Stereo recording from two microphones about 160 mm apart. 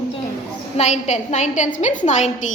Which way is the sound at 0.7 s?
45° left (ahead or behind).